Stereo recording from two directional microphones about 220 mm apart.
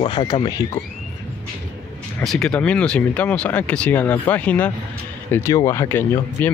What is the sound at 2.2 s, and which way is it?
Speech, centre (ahead or behind).